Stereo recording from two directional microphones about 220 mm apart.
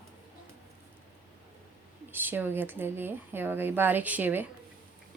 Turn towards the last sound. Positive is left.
turn(degrees=-10)  # may be behind; listen again after turning